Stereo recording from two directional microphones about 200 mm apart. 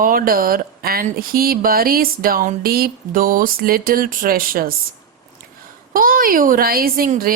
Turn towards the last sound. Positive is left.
turn(degrees=-45)  # may be behind; listen again after turning